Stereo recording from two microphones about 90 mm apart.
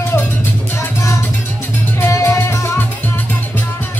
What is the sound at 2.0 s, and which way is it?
Music, 30° left (ahead or behind).